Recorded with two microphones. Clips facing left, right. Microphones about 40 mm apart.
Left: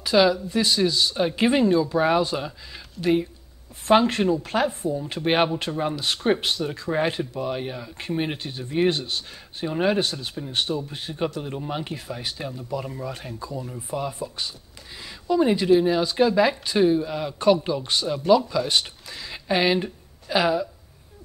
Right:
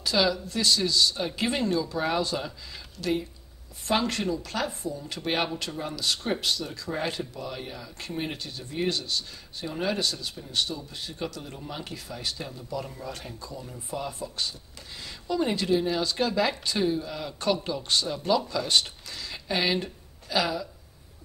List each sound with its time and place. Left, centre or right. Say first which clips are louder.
0.0 s speech: left 6 dB; centre